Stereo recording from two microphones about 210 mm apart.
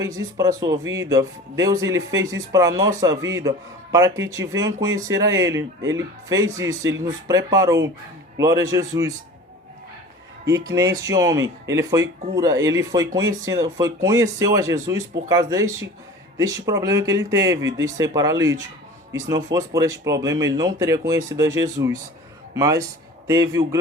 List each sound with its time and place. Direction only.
0.0 s speech: 15° right (ahead or behind)
10.5 s speech: 15° right (ahead or behind)